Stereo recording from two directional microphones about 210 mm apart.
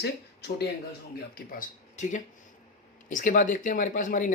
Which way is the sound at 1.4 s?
40° left (ahead or behind).